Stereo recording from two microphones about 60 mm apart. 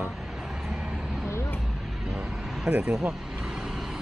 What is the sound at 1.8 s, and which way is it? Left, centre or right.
Vehicle, centre.